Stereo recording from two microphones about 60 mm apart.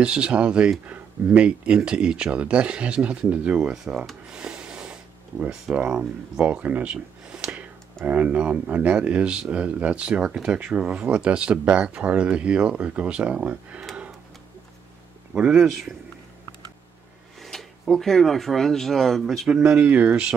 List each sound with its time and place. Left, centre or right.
0.0 s speech: centre
3.7 s speech: centre
4.3 s a sound: centre
5.8 s speech: right
6.9 s a sound: centre
8.0 s speech: right
15.3 s speech: centre
17.4 s speech: centre
19.8 s speech: right